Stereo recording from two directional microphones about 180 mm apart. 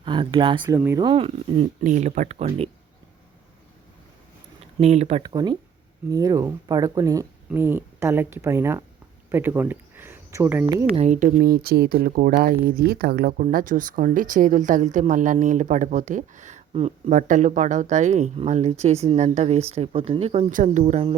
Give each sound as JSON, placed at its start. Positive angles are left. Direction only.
{"t": 0.0, "sound": "speech", "side_deg": -25}
{"t": 4.8, "sound": "speech", "side_deg": -35}
{"t": 5.2, "sound": "speech", "side_deg": -20}
{"t": 10.9, "sound": "speech", "side_deg": -40}